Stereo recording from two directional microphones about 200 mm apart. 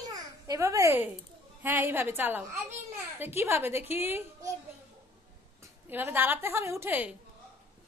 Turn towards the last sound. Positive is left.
turn(degrees=-10)  # may be behind; listen again after turning